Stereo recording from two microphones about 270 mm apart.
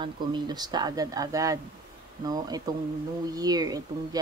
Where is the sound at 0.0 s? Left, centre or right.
Centre.